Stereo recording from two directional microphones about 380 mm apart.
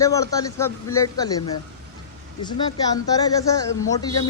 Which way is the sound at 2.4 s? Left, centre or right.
Centre.